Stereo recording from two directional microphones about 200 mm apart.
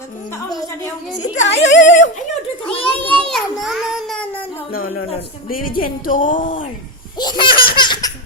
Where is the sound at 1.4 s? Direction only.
60° left (ahead or behind).